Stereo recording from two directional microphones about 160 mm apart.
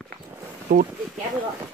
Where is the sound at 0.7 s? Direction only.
60° right (ahead or behind).